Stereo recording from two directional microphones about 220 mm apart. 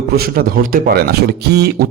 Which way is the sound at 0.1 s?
45° right (ahead or behind).